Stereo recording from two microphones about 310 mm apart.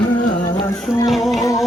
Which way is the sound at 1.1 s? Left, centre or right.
Centre.